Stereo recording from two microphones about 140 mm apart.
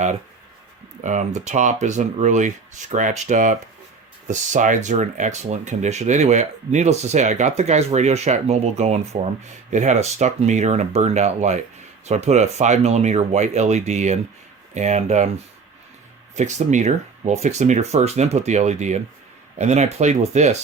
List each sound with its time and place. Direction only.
1.0 s speech: 60° right (ahead or behind)
16.3 s speech: 55° right (ahead or behind)